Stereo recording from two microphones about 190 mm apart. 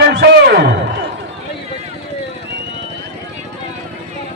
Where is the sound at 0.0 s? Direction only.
60° right (ahead or behind).